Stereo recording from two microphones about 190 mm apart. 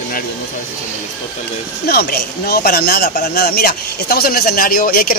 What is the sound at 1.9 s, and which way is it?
A man's voice, 55° left (ahead or behind).